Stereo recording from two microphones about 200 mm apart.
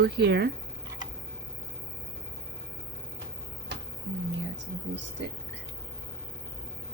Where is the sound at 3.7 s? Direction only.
60° right (ahead or behind).